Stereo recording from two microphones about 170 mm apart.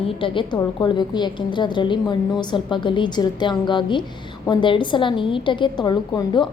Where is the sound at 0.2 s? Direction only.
25° left (ahead or behind).